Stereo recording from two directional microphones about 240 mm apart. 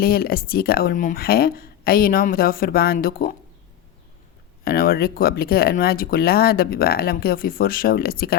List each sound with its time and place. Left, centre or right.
0.0 s speech: left
4.6 s speech: left